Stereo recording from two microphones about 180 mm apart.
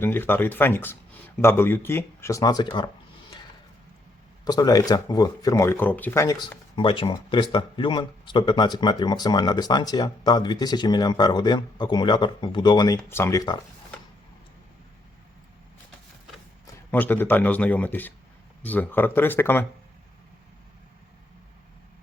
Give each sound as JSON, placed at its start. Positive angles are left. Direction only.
{"t": 0.0, "sound": "speech", "side_deg": 10}
{"t": 4.4, "sound": "speech", "side_deg": 20}
{"t": 16.9, "sound": "speech", "side_deg": 10}